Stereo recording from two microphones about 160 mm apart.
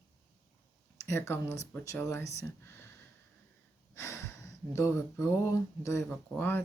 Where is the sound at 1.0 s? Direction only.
15° left (ahead or behind).